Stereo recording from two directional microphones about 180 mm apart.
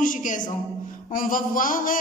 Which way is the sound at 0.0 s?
45° left (ahead or behind).